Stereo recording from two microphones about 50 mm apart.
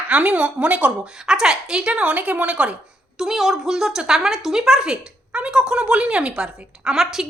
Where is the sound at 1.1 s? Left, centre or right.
Centre.